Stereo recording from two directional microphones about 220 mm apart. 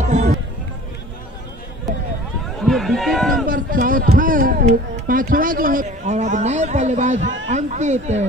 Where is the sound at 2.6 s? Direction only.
Centre (ahead or behind).